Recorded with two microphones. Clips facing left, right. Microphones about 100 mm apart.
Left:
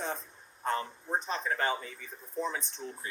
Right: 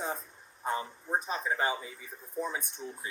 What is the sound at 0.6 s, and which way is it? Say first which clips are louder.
Speech: left 1 dB; 10° right (ahead or behind).